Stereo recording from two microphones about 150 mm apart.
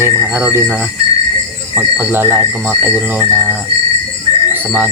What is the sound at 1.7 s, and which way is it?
Music, 10° right (ahead or behind).